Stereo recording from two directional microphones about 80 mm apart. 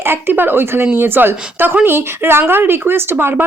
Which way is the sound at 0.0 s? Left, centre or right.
Right.